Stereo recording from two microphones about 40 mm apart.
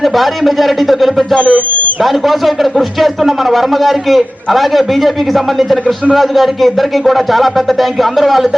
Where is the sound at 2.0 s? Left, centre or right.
Centre.